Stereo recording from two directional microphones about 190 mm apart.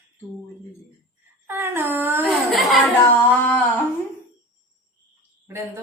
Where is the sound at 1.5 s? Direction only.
10° right (ahead or behind).